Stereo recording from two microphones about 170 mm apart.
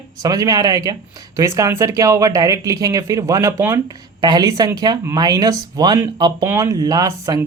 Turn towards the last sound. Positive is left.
turn(degrees=-20)  # may be behind; listen again after turning